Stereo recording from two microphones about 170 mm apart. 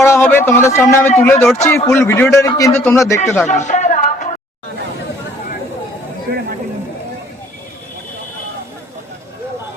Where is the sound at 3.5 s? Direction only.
45° left (ahead or behind).